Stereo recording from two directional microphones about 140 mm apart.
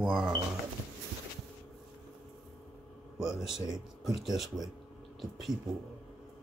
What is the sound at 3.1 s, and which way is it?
Speech, 5° right (ahead or behind).